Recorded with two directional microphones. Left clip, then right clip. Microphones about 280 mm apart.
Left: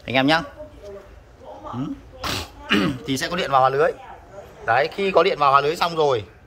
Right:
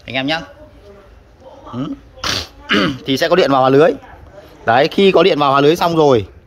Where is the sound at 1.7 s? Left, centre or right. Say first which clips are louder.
Right 10 dB; centre; by 6.2 s right.